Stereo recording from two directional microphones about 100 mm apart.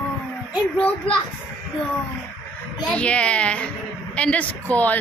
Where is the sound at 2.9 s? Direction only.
10° left (ahead or behind).